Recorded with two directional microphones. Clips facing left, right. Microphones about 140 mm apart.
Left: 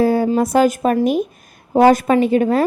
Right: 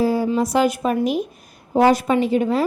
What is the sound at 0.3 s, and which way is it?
A woman's voice, 50° left (ahead or behind).